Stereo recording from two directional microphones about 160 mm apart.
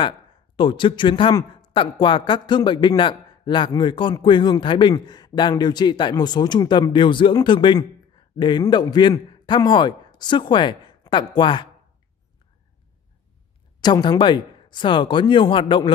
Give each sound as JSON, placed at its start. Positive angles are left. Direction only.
{"t": 0.6, "sound": "speech", "side_deg": 30}
{"t": 13.7, "sound": "speech", "side_deg": 25}